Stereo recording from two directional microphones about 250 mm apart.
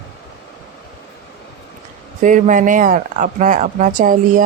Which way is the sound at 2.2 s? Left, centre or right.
Right.